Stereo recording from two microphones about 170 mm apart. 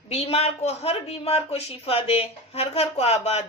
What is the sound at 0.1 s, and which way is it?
A man's voice, 35° left (ahead or behind).